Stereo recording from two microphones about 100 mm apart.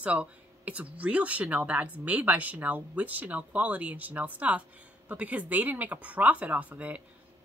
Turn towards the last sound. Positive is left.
turn(degrees=-15)  # may be behind; listen again after turning